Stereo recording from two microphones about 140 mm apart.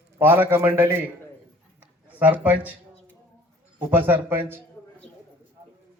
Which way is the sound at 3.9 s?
15° right (ahead or behind).